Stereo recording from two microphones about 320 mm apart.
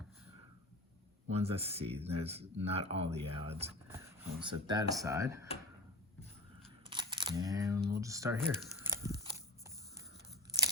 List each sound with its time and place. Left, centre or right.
1.3 s speech: centre
6.9 s camera: centre
7.9 s speech: centre